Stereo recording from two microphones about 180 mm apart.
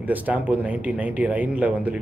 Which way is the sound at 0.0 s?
10° right (ahead or behind).